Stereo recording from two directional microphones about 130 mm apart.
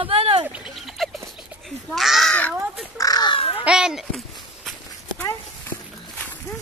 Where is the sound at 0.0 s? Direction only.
45° right (ahead or behind).